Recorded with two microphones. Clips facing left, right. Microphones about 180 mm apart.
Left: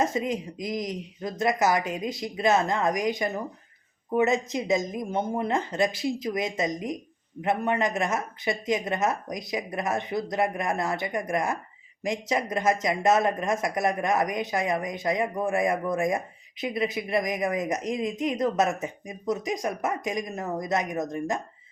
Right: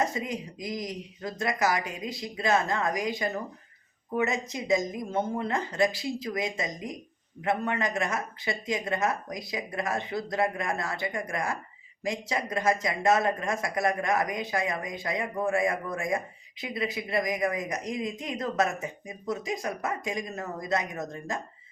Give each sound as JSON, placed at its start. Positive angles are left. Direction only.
{"t": 0.0, "sound": "speech", "side_deg": 20}